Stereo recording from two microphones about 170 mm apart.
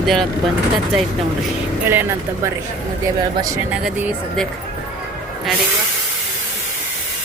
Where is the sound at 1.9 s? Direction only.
10° right (ahead or behind).